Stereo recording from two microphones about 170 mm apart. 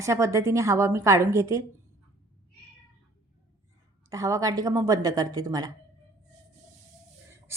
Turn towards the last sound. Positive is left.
turn(degrees=-15)  # may be behind; listen again after turning